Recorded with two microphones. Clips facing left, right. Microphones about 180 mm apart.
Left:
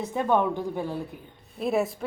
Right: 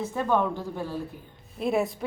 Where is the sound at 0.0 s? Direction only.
15° left (ahead or behind).